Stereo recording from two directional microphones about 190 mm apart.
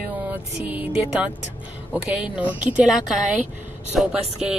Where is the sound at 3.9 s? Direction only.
Centre (ahead or behind).